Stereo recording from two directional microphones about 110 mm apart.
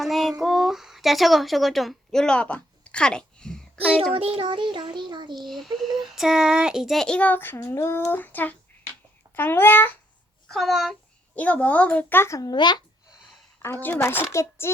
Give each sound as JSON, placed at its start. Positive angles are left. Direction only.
{"t": 0.0, "sound": "a sound", "side_deg": 0}
{"t": 4.1, "sound": "a child's voice", "side_deg": -60}
{"t": 5.3, "sound": "a child's voice", "side_deg": 0}
{"t": 10.5, "sound": "a child's voice", "side_deg": 0}
{"t": 11.3, "sound": "speech", "side_deg": 15}
{"t": 13.6, "sound": "speech", "side_deg": 20}